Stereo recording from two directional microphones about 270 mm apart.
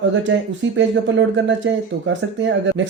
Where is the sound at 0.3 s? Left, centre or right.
Right.